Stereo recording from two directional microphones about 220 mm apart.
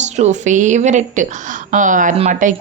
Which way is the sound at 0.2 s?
35° right (ahead or behind).